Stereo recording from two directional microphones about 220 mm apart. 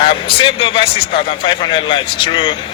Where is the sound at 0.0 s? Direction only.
25° left (ahead or behind).